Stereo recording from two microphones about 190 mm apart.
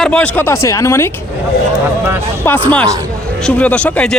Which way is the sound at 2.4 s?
10° left (ahead or behind).